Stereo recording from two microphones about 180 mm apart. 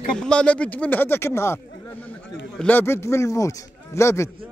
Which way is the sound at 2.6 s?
10° left (ahead or behind).